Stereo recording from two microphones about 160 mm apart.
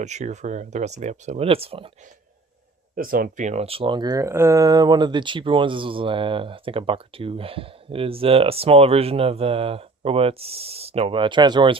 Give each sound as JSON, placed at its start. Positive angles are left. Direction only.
{"t": 0.0, "sound": "speech", "side_deg": -45}
{"t": 2.9, "sound": "speech", "side_deg": -60}